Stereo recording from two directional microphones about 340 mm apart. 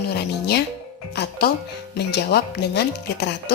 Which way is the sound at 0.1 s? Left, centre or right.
Left.